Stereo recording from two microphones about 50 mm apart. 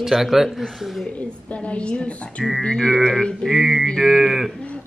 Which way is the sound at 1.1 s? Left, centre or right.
Left.